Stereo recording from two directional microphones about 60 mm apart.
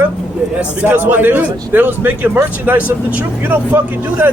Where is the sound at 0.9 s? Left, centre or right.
Right.